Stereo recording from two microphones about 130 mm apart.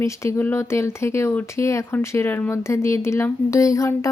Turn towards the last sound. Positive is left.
turn(degrees=25)  # may be behind; listen again after turning